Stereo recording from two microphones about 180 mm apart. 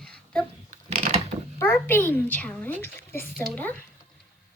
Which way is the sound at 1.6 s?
10° left (ahead or behind).